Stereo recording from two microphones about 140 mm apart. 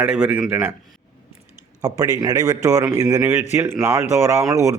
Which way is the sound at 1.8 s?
25° right (ahead or behind).